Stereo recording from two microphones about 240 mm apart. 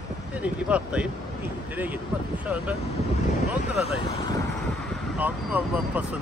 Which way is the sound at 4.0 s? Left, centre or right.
Centre.